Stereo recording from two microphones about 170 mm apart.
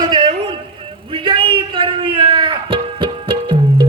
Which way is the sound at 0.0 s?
25° right (ahead or behind).